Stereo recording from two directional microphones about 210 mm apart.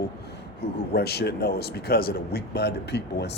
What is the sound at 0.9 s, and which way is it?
Speech, 50° left (ahead or behind).